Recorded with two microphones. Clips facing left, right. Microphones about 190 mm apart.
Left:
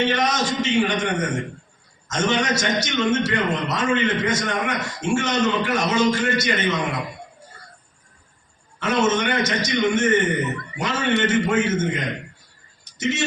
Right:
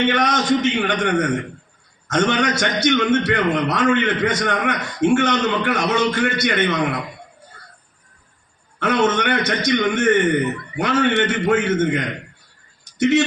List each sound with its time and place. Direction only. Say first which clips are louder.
0.0 s a man's voice: right 2 dB; 60° right (ahead or behind)
8.8 s a man's voice: right 2 dB; 60° right (ahead or behind)